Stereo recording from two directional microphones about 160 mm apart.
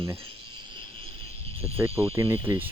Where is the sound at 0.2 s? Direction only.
30° right (ahead or behind).